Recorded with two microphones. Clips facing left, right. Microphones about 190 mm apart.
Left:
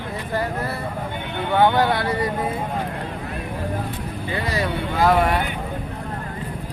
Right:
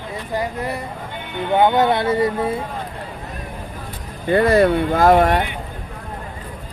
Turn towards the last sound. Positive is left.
turn(degrees=-45)  # may be behind; listen again after turning